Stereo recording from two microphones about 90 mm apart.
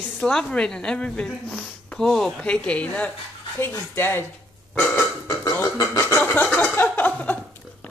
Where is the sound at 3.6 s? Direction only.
25° left (ahead or behind).